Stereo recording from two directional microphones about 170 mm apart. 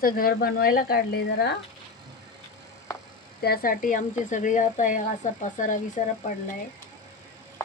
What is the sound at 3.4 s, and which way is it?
A woman's voice, 60° left (ahead or behind).